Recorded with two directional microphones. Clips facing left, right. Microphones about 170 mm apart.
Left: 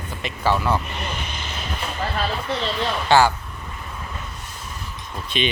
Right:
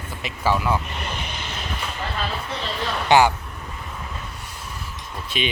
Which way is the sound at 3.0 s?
15° right (ahead or behind).